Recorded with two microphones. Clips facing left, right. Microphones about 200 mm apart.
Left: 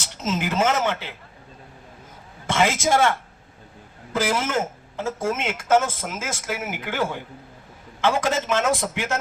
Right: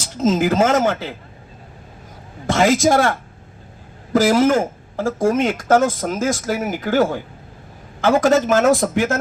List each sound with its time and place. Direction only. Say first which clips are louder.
0.2 s speech: right 8 dB; 35° right (ahead or behind)
2.5 s speech: right 6 dB; 40° right (ahead or behind)